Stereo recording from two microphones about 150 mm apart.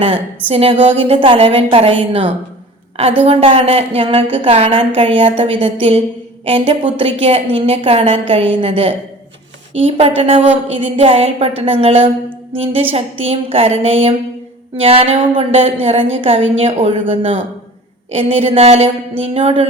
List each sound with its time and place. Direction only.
0.0 s a woman's voice: 40° right (ahead or behind)